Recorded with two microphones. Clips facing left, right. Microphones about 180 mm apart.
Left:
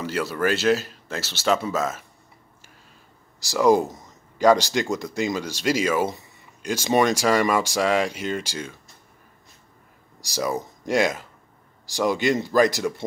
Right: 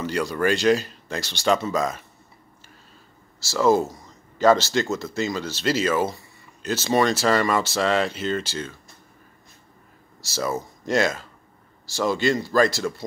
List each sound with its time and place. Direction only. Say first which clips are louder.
0.0 s speech: right 1 dB; 5° left (ahead or behind)
3.3 s speech: left 1 dB; 15° left (ahead or behind)
10.2 s speech: left 1 dB; 15° left (ahead or behind)